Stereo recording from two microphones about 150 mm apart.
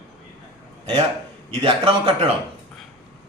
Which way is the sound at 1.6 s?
35° right (ahead or behind).